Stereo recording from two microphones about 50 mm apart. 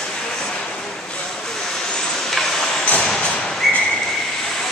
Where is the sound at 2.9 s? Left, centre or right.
Left.